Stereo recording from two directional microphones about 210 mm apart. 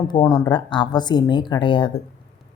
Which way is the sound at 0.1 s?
20° left (ahead or behind).